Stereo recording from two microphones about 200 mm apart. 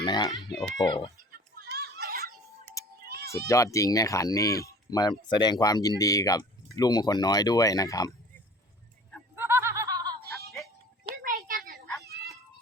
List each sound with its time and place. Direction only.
0.0 s speech: 20° left (ahead or behind)
1.3 s children playing: 55° right (ahead or behind)
3.4 s speech: 15° left (ahead or behind)
9.3 s snicker: 10° right (ahead or behind)
11.2 s a sound: 45° right (ahead or behind)
12.0 s children playing: 55° right (ahead or behind)